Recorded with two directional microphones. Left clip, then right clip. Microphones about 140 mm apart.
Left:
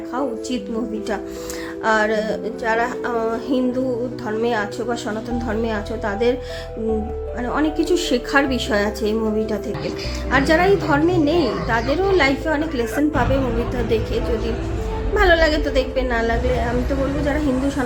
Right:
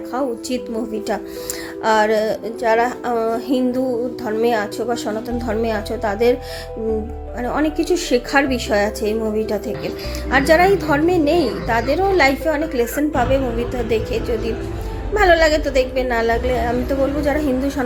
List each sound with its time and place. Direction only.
1.8 s a woman's voice: 25° right (ahead or behind)
7.4 s a woman's voice: 25° right (ahead or behind)
15.1 s a woman's voice: 20° right (ahead or behind)